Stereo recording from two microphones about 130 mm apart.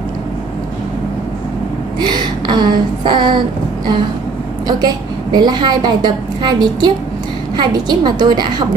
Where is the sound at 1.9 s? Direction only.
35° right (ahead or behind).